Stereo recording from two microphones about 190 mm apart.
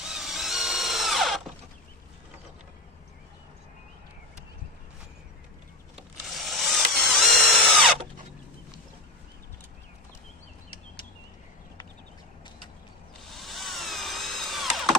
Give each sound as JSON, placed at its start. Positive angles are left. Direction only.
{"t": 0.0, "sound": "drill", "side_deg": 0}
{"t": 6.0, "sound": "drill", "side_deg": 0}
{"t": 13.3, "sound": "a sound", "side_deg": 0}